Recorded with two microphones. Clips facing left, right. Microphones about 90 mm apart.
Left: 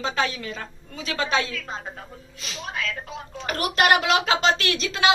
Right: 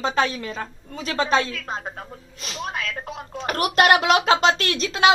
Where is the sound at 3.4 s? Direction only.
55° right (ahead or behind).